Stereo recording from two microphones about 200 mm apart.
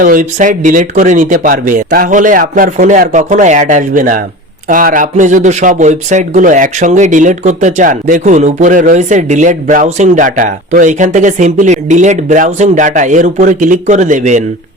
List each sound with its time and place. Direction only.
0.0 s speech: 40° right (ahead or behind)